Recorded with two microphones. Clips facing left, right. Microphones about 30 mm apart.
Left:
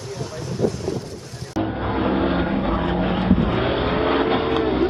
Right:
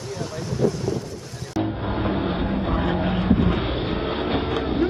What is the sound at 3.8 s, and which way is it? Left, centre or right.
Vehicle, left.